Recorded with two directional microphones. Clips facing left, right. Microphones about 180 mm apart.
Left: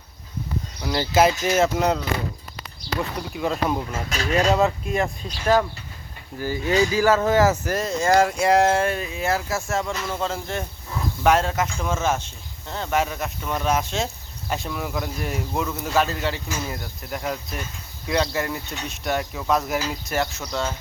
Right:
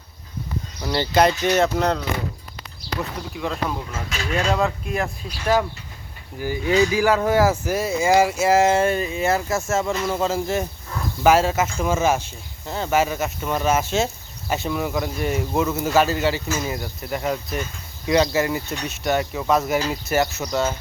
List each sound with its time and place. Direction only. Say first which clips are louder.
0.9 s speech: right 1 dB; 5° left (ahead or behind)
3.0 s speech: left 2 dB; centre (ahead or behind)
4.1 s speech: left 3 dB; 40° left (ahead or behind)
4.5 s speech: left 2 dB; centre (ahead or behind)
9.9 s speech: right 5 dB; 20° right (ahead or behind)
10.2 s speech: right 5 dB; 5° right (ahead or behind)